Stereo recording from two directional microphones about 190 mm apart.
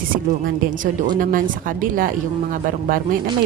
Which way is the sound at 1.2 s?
45° right (ahead or behind).